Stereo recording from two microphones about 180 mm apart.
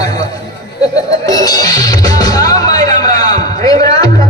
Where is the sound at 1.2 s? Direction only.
20° left (ahead or behind).